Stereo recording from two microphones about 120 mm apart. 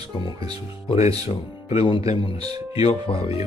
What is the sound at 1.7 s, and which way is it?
Speech, 55° left (ahead or behind).